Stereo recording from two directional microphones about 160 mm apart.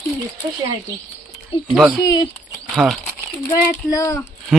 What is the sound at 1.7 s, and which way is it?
Speech, centre (ahead or behind).